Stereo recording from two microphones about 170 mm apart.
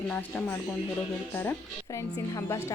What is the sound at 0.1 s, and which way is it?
A woman's voice, 10° left (ahead or behind).